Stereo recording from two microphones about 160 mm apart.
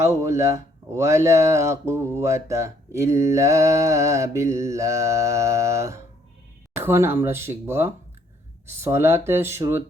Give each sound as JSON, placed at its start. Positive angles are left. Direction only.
{"t": 0.0, "sound": "speech", "side_deg": -20}